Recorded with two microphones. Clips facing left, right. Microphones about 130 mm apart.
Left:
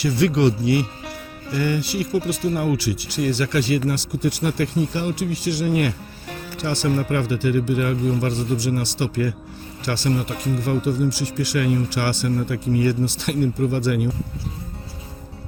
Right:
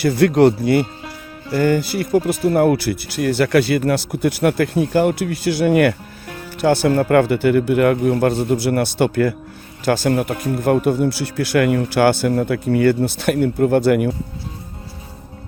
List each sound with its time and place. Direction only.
0.0 s speech: 55° right (ahead or behind)